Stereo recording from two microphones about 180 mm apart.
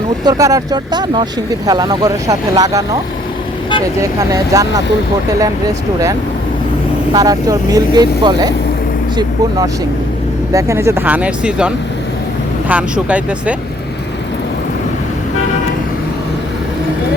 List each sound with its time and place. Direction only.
0.3 s speech: 20° right (ahead or behind)
4.0 s speech: 20° right (ahead or behind)
7.1 s speech: 20° right (ahead or behind)
10.5 s speech: 15° right (ahead or behind)